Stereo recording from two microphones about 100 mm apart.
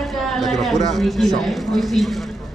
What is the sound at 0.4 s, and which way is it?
A man's voice, centre (ahead or behind).